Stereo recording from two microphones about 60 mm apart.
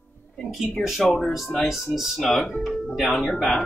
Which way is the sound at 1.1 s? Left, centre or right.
Centre.